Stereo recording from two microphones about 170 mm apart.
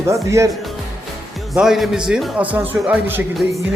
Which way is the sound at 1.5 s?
Centre (ahead or behind).